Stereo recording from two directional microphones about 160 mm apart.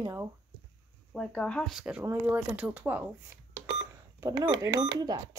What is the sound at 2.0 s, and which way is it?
Speech, 15° right (ahead or behind).